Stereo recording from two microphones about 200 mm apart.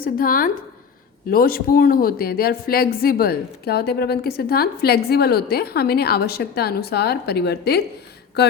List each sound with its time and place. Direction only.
0.0 s a woman's voice: 45° left (ahead or behind)